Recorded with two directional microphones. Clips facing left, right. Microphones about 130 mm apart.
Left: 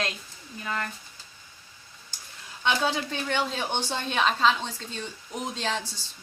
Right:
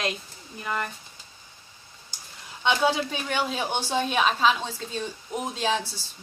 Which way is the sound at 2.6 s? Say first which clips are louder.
Right 3 dB; 15° right (ahead or behind).